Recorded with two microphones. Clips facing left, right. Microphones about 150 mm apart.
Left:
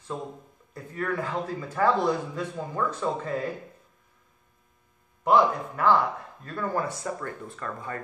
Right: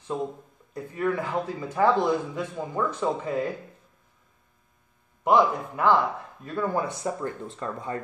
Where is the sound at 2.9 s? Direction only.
15° right (ahead or behind).